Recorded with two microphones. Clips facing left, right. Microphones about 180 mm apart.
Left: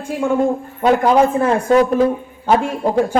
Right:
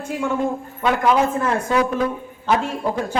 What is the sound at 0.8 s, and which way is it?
A man's voice, 40° left (ahead or behind).